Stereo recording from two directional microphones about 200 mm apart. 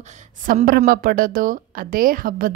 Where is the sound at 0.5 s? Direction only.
45° right (ahead or behind).